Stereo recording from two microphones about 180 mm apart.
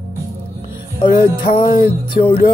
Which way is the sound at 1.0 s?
25° left (ahead or behind).